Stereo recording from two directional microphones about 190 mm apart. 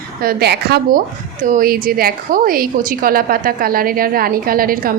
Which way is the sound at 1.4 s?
45° right (ahead or behind).